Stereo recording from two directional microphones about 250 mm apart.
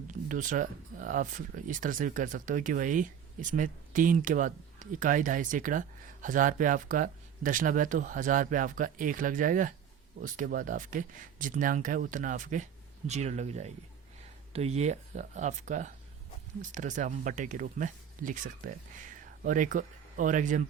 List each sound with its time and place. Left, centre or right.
0.1 s speech: right